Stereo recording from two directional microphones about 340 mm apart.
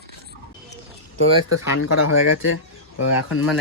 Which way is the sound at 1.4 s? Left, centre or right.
Left.